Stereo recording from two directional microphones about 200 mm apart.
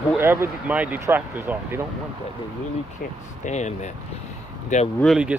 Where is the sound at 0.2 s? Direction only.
10° right (ahead or behind).